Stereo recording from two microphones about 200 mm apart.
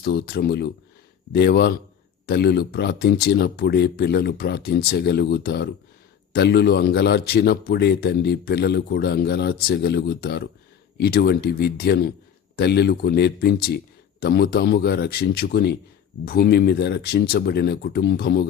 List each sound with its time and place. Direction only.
0.0 s speech: 50° left (ahead or behind)